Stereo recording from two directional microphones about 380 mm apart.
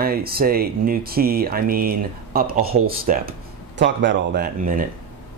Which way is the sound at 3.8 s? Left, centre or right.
Right.